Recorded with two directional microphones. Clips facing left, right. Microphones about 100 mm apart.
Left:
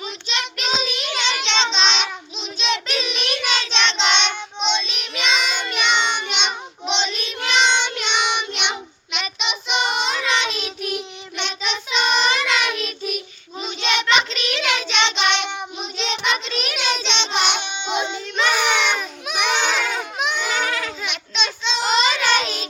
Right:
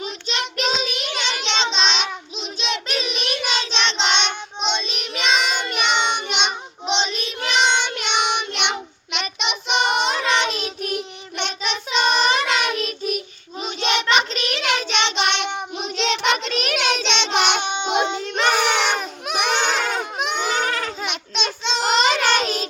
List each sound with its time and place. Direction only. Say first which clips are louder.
0.0 s child singing: right 1 dB; 45° right (ahead or behind)
15.8 s child singing: right 4 dB; 75° right (ahead or behind); by 22.6 s 45° right (ahead or behind)